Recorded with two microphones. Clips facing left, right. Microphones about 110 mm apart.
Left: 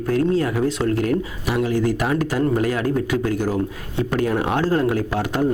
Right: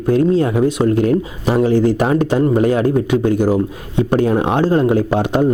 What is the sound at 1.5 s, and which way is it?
A man's voice, 30° right (ahead or behind).